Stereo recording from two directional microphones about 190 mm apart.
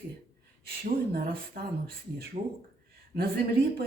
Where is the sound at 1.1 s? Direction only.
55° right (ahead or behind).